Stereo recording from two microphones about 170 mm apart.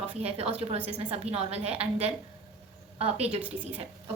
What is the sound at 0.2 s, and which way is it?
A woman's voice, 35° right (ahead or behind).